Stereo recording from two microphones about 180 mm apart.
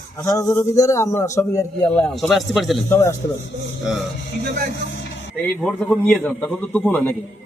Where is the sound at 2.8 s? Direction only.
15° left (ahead or behind).